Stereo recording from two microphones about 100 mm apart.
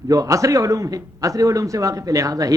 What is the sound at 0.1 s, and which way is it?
Speech, 35° right (ahead or behind).